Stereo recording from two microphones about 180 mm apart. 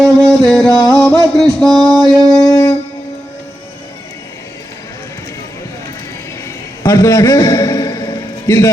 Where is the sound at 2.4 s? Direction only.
20° left (ahead or behind).